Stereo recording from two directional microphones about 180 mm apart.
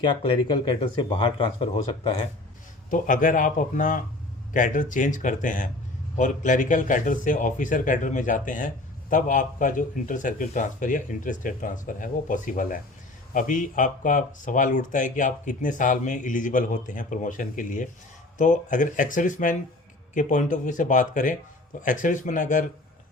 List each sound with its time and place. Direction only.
0.0 s speech: 30° left (ahead or behind)
2.9 s a man's voice: 45° left (ahead or behind)